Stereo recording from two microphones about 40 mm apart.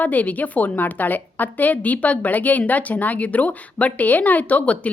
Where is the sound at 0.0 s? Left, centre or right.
Left.